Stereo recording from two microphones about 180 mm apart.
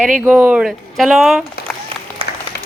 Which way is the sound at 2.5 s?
60° left (ahead or behind).